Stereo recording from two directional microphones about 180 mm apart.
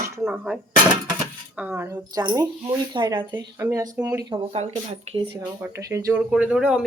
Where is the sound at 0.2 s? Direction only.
5° right (ahead or behind).